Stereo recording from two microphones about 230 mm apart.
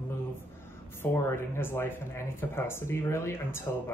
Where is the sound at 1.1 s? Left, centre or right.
Centre.